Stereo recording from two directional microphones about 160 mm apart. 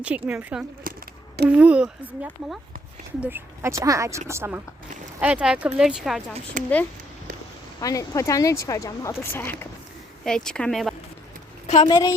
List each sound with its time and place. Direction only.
0.3 s speech: 10° right (ahead or behind)
0.9 s a sound: 65° right (ahead or behind)
1.5 s speech: 10° right (ahead or behind)
6.6 s speech: 55° right (ahead or behind)
7.8 s speech: 20° left (ahead or behind)
10.2 s speech: 5° left (ahead or behind)
11.9 s speech: 30° left (ahead or behind)